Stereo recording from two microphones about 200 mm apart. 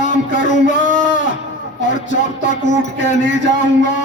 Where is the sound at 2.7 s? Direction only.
40° left (ahead or behind).